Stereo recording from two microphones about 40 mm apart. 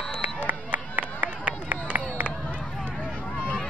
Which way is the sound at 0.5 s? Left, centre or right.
Right.